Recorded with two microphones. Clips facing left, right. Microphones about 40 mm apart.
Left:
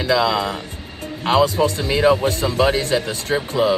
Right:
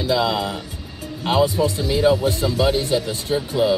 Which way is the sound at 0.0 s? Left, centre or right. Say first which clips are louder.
Left 2 dB; left.